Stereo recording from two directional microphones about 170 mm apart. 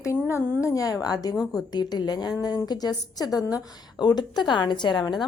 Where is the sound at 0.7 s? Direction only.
20° left (ahead or behind).